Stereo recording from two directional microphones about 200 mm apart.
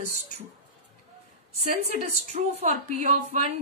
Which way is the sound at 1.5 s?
35° right (ahead or behind).